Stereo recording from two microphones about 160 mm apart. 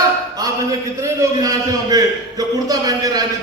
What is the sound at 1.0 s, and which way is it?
A man's voice, 20° right (ahead or behind).